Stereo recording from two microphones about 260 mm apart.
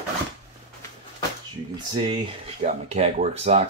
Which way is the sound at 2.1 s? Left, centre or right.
Right.